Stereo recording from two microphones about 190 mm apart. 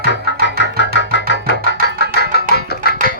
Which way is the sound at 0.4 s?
70° left (ahead or behind).